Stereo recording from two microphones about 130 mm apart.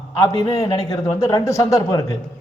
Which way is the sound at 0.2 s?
30° left (ahead or behind).